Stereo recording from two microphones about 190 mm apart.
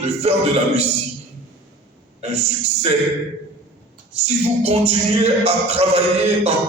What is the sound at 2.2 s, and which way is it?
Music, 35° right (ahead or behind).